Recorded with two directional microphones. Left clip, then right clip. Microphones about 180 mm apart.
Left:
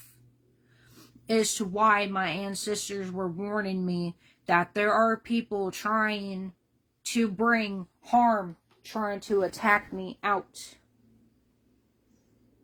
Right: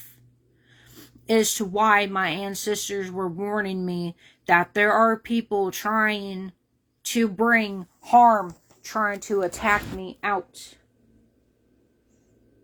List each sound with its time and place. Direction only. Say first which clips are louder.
1.0 s speech: right 5 dB; 30° right (ahead or behind)